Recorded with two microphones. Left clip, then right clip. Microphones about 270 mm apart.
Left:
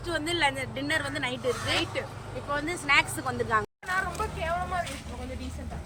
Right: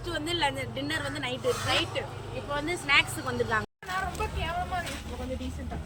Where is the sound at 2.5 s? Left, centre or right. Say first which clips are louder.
Even; centre.